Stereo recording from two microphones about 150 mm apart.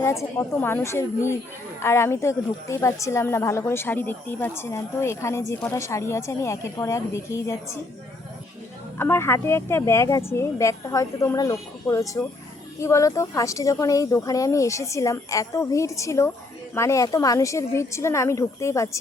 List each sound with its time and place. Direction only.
0.0 s a woman's voice: 15° left (ahead or behind)
9.0 s speech: 15° left (ahead or behind)